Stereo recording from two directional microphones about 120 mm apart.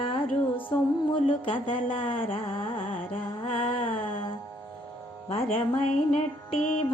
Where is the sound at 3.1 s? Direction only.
50° left (ahead or behind).